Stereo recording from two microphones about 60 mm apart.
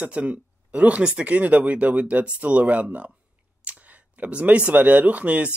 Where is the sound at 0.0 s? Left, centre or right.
Right.